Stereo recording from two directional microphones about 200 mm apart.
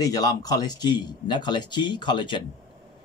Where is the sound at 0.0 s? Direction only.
20° left (ahead or behind).